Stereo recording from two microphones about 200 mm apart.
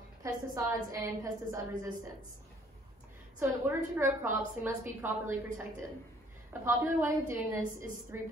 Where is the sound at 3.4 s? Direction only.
10° right (ahead or behind).